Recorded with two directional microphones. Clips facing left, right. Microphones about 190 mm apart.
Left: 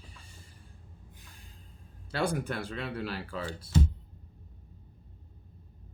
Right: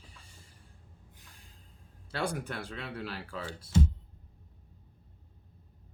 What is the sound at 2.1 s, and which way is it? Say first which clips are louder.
Speech: left 4 dB; 5° left (ahead or behind).